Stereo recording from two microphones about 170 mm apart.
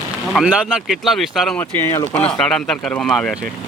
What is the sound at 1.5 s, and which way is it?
Speech, 10° left (ahead or behind).